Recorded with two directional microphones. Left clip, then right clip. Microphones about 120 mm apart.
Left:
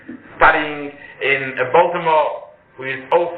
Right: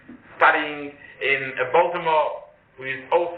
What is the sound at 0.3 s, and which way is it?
A man's voice, 20° left (ahead or behind).